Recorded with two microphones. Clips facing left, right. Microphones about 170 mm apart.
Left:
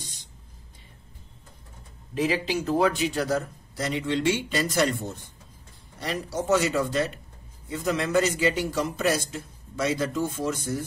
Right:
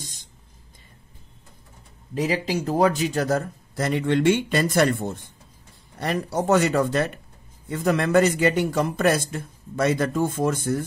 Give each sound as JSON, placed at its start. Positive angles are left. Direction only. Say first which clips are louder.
{"t": 2.1, "sound": "a man's voice", "louder": "right 1 dB", "side_deg": -40}